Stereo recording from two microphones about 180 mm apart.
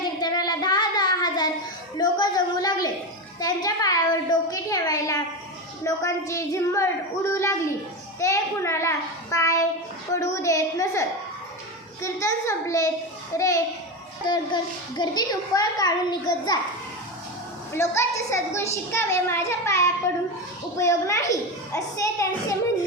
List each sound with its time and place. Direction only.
0.0 s child singing: 20° left (ahead or behind)
2.0 s a sound: 25° left (ahead or behind)
3.4 s a child's voice: 20° left (ahead or behind)
12.0 s a woman's voice: 15° left (ahead or behind)
17.7 s a woman's voice: 15° left (ahead or behind)